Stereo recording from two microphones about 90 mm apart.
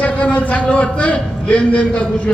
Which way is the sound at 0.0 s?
15° left (ahead or behind).